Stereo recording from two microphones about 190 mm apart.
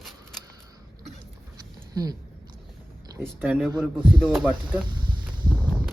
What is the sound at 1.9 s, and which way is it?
Speech, 20° right (ahead or behind).